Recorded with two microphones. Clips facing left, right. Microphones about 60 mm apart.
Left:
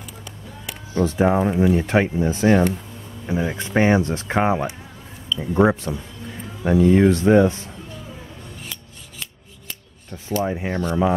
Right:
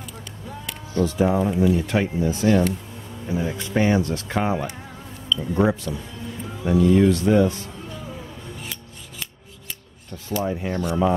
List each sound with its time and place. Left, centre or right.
0.9 s speech: left
10.4 s speech: left